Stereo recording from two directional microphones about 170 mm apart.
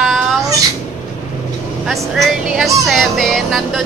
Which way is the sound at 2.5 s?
Centre (ahead or behind).